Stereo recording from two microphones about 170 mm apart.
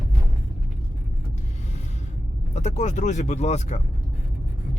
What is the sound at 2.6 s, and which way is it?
Speech, 45° left (ahead or behind).